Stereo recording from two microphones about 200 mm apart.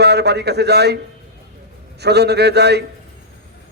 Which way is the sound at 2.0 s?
55° right (ahead or behind).